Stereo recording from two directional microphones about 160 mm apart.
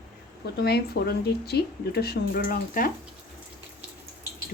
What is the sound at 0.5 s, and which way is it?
Speech, 90° left.